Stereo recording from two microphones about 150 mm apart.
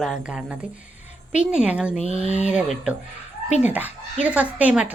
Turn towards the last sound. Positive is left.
turn(degrees=-10)  # may be behind; listen again after turning